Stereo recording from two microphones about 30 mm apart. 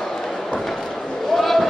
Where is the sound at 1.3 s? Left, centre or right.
Centre.